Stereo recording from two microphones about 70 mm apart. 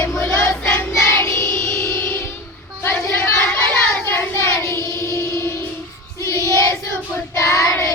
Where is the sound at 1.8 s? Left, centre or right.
Left.